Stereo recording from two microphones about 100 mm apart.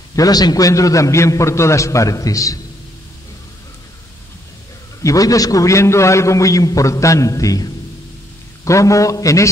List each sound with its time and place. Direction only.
0.1 s a man's voice: 40° left (ahead or behind)
5.0 s a man's voice: 35° left (ahead or behind)